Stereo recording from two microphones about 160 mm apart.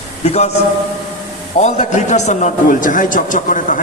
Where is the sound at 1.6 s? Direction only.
45° left (ahead or behind).